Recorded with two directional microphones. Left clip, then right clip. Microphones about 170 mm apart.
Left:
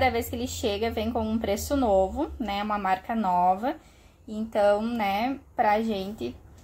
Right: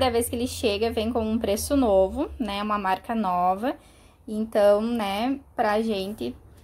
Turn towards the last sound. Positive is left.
turn(degrees=-20)  # may be behind; listen again after turning